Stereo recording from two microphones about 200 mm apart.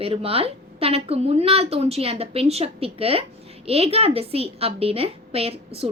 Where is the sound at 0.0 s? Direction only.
30° right (ahead or behind).